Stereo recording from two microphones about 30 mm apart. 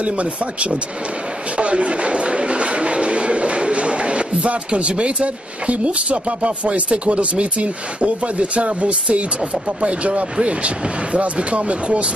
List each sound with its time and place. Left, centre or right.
0.0 s speech: right
1.6 s a sound: right
4.6 s speech: right
9.7 s speech: right